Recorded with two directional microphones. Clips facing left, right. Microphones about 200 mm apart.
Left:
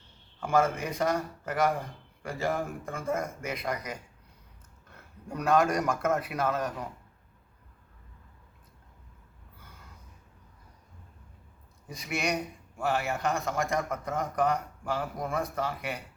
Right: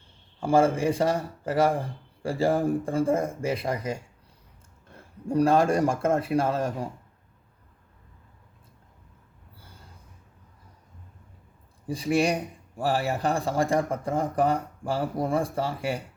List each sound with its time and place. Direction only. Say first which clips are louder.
0.3 s a man's voice: right 5 dB; 30° right (ahead or behind)
11.9 s a man's voice: right 8 dB; 30° right (ahead or behind)